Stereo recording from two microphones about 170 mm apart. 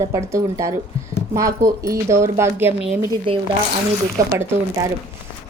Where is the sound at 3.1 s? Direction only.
30° right (ahead or behind).